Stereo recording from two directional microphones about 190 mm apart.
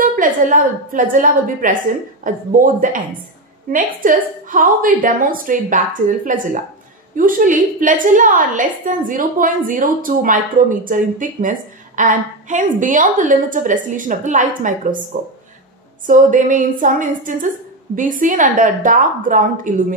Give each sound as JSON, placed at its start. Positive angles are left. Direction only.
{"t": 0.0, "sound": "a woman's voice", "side_deg": -45}
{"t": 16.1, "sound": "a woman's voice", "side_deg": -45}